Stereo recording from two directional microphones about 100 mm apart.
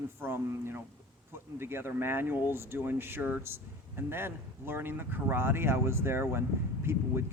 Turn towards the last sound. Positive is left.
turn(degrees=-25)  # may be behind; listen again after turning